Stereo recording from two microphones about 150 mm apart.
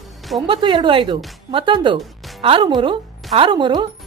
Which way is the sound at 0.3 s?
30° right (ahead or behind).